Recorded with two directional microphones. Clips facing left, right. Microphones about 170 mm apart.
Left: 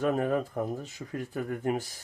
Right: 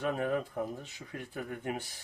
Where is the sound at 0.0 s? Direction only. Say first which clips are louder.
Left 5 dB; 45° left (ahead or behind).